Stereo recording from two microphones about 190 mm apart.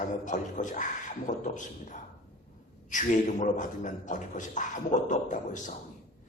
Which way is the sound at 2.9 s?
40° left (ahead or behind).